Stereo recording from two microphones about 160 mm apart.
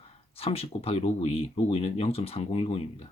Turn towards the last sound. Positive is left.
turn(degrees=40)  # may be behind; listen again after turning